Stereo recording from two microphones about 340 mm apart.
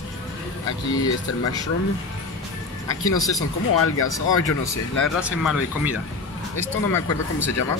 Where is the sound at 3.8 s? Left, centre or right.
Left.